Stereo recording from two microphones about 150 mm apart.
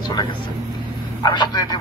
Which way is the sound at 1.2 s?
30° left (ahead or behind).